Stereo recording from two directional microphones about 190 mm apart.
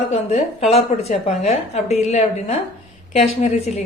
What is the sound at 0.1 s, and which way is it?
A woman's voice, 35° left (ahead or behind).